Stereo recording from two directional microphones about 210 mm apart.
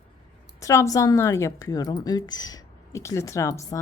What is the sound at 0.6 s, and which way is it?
A woman's voice, 15° left (ahead or behind).